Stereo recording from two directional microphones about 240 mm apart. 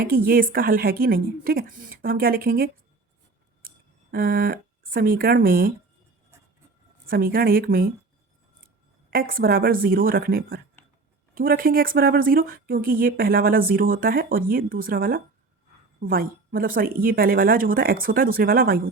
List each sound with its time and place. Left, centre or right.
0.3 s speech: right
4.1 s speech: right
7.1 s speech: right
9.0 s speech: right